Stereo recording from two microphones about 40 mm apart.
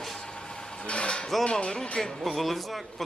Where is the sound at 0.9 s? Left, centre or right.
Left.